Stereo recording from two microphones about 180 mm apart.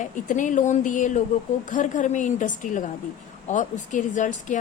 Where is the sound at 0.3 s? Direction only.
45° left (ahead or behind).